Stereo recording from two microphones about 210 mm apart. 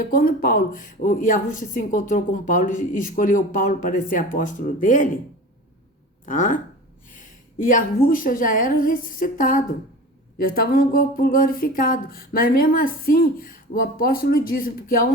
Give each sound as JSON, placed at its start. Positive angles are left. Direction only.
{"t": 0.0, "sound": "speech", "side_deg": 40}
{"t": 6.2, "sound": "speech", "side_deg": 40}